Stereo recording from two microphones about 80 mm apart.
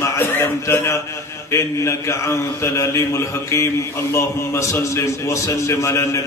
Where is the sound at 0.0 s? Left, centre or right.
Left.